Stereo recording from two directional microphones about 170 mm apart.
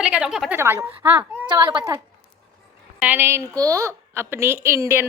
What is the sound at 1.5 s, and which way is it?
Speech, 30° right (ahead or behind).